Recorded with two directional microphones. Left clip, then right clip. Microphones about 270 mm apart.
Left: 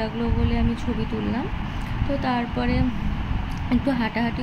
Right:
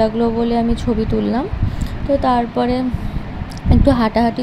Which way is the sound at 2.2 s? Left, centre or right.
Centre.